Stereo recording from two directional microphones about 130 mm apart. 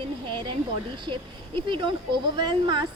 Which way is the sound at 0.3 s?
35° right (ahead or behind).